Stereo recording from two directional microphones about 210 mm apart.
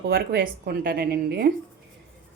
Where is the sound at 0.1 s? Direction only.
50° right (ahead or behind).